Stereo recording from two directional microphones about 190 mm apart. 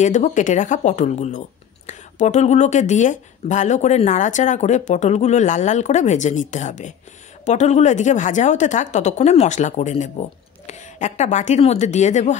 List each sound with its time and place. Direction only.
0.0 s speech: 40° left (ahead or behind)